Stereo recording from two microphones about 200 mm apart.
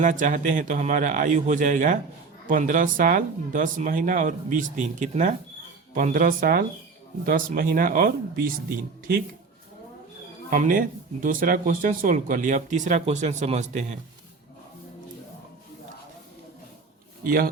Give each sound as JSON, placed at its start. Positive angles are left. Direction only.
{"t": 0.0, "sound": "speech", "side_deg": -40}
{"t": 10.5, "sound": "speech", "side_deg": -45}
{"t": 17.2, "sound": "speech", "side_deg": -45}